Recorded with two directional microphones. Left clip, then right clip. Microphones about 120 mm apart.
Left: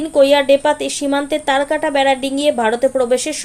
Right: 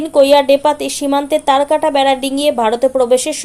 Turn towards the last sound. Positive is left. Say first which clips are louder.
# right 3 dB
turn(degrees=-25)  # may be behind; listen again after turning